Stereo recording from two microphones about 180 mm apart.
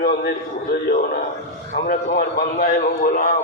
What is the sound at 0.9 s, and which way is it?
A man's voice, 50° left (ahead or behind).